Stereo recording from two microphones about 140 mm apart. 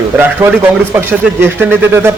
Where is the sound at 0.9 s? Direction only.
15° right (ahead or behind).